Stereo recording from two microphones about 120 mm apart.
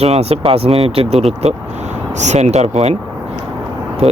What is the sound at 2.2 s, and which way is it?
Speech, 75° right (ahead or behind).